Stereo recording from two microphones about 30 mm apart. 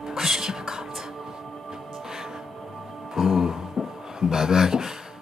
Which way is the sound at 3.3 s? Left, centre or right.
Centre.